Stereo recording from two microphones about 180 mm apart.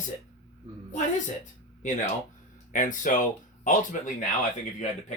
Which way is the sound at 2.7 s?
45° left (ahead or behind).